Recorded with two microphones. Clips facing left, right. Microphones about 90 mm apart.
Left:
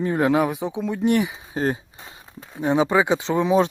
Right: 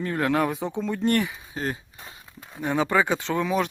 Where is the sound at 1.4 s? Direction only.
30° left (ahead or behind).